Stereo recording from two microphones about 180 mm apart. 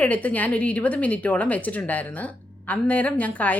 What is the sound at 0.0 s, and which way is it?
A woman's voice, 10° left (ahead or behind).